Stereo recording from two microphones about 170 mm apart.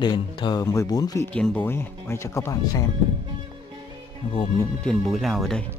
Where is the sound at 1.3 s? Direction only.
5° left (ahead or behind).